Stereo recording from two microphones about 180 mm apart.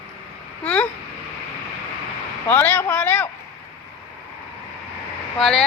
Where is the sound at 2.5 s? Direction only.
10° left (ahead or behind).